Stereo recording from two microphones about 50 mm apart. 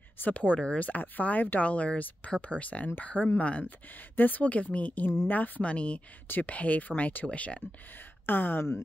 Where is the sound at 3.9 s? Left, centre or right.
Left.